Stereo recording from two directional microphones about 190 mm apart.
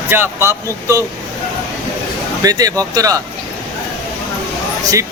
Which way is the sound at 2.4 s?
20° right (ahead or behind).